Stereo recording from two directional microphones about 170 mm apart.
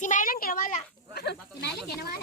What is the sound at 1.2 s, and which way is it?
Speech, 70° left (ahead or behind).